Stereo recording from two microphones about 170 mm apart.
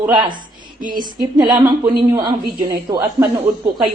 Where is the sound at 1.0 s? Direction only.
25° right (ahead or behind).